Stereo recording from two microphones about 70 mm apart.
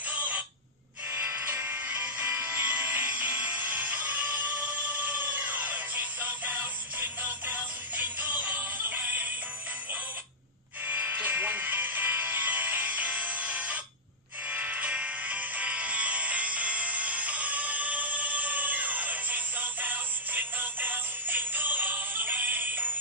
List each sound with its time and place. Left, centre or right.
0.1 s a sound: right
1.1 s music: right
10.9 s music: right